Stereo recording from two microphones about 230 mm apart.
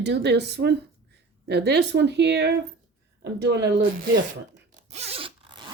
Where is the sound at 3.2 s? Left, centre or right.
Right.